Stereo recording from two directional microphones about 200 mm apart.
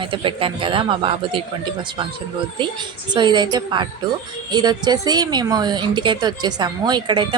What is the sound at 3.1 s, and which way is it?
A woman's voice, 20° right (ahead or behind).